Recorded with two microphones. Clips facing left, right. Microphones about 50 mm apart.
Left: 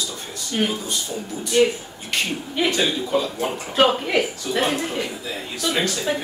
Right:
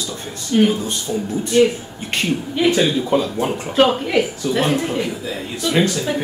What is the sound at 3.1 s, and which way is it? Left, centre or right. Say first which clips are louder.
Speech: right 4 dB; right.